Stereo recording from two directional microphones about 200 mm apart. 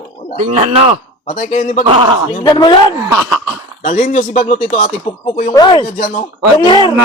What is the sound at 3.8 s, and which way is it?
Speech, 40° left (ahead or behind).